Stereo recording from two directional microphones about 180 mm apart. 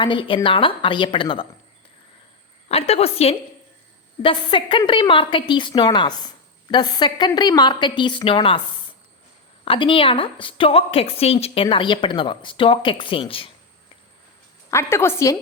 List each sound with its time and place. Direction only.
0.0 s a woman's voice: 25° left (ahead or behind)
2.6 s a woman's voice: 35° left (ahead or behind)
9.6 s a woman's voice: 30° left (ahead or behind)
14.7 s a woman's voice: 15° left (ahead or behind)